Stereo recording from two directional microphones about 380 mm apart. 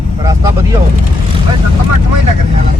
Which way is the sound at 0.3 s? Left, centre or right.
Centre.